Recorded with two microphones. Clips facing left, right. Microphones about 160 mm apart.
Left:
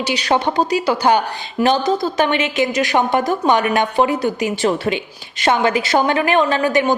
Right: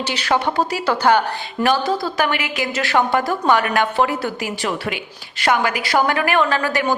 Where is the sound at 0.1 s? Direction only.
20° left (ahead or behind).